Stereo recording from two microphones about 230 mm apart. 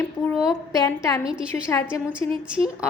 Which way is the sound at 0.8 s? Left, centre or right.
Centre.